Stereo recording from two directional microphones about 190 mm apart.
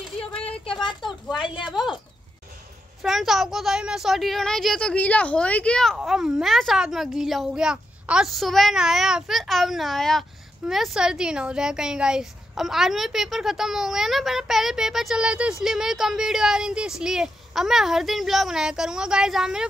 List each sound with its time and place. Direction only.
0.2 s a sound: 5° left (ahead or behind)
1.4 s speech: 25° left (ahead or behind)
3.0 s speech: centre (ahead or behind)